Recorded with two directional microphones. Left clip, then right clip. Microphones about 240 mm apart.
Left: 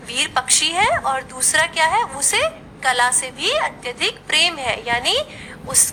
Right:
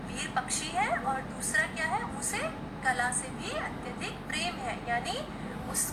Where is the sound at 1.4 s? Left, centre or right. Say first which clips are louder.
Left 14 dB; left.